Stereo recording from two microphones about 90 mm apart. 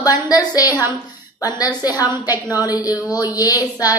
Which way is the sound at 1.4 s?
45° left (ahead or behind).